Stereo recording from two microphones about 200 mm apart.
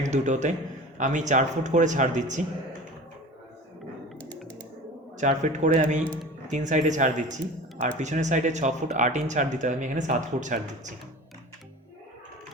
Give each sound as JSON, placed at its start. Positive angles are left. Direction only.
{"t": 0.1, "sound": "speech", "side_deg": -35}
{"t": 5.1, "sound": "speech", "side_deg": -35}